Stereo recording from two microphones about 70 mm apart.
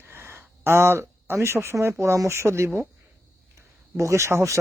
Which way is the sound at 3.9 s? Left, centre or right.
Right.